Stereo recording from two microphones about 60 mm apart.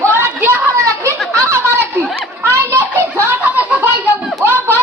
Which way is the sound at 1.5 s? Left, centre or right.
Right.